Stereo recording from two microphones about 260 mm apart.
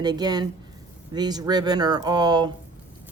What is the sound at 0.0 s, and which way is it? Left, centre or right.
Speech, centre.